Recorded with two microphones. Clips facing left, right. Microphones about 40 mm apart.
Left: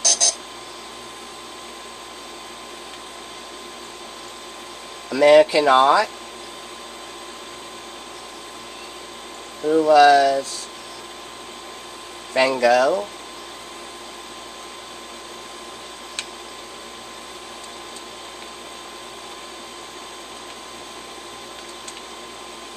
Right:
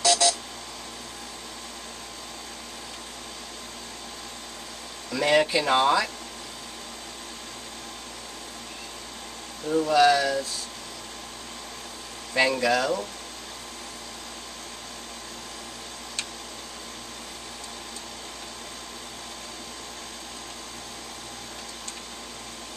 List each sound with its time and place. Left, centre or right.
0.0 s a sound: right
5.1 s speech: left
9.8 s speech: left
12.4 s speech: left
12.6 s speech: left